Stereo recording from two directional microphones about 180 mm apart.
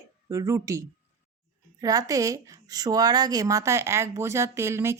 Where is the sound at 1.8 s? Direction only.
20° right (ahead or behind).